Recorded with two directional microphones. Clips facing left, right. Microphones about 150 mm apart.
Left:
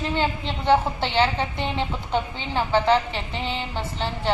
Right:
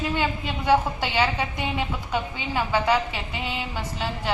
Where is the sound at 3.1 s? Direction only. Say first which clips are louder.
Left 2 dB; 10° right (ahead or behind).